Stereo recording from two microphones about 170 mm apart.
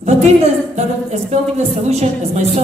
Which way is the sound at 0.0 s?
40° right (ahead or behind).